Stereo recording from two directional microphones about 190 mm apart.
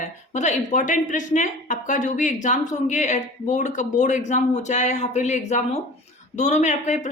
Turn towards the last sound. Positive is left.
turn(degrees=40)  # may be behind; listen again after turning